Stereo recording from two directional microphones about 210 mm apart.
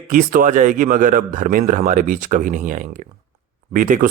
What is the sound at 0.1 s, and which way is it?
Speech, 40° right (ahead or behind).